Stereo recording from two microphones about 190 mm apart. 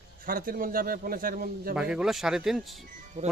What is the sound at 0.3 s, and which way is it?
A man's voice, 50° right (ahead or behind).